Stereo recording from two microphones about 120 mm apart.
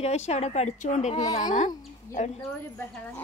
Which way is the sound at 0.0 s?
65° left (ahead or behind).